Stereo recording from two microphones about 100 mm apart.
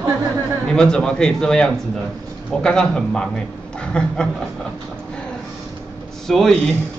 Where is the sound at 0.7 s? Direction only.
5° left (ahead or behind).